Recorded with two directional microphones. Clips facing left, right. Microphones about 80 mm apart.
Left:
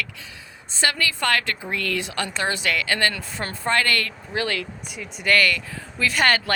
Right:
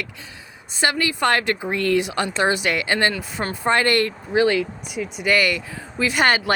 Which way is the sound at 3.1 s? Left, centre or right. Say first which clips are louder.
Right 4 dB; centre.